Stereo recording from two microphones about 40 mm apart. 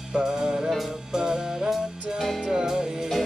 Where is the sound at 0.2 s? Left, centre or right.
Centre.